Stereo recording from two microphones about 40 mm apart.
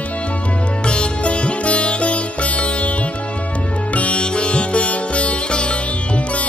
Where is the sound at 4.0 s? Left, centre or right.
Left.